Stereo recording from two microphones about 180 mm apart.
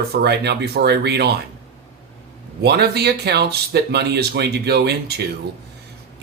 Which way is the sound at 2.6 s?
65° right (ahead or behind).